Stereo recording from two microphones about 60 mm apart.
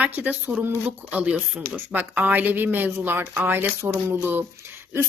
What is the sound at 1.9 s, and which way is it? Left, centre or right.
A woman's voice, right.